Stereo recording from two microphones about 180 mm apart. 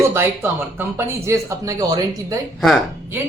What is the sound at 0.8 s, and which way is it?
Speech, 15° right (ahead or behind).